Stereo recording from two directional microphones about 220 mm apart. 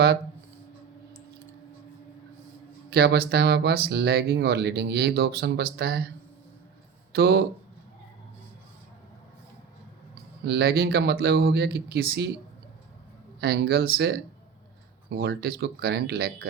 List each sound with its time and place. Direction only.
2.9 s speech: 45° right (ahead or behind)
7.1 s speech: 45° right (ahead or behind)
10.4 s speech: 45° right (ahead or behind)
13.4 s speech: 45° right (ahead or behind)